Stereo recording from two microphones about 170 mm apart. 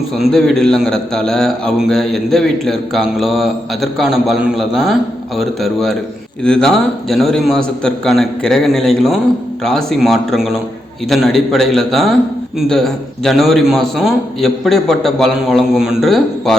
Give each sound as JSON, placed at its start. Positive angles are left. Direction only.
{"t": 0.2, "sound": "a man's voice", "side_deg": 0}